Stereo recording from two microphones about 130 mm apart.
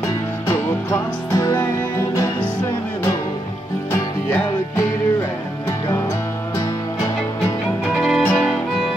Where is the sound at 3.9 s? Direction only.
20° left (ahead or behind).